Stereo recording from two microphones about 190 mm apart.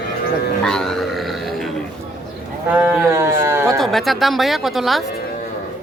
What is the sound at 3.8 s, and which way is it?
Speech, centre (ahead or behind).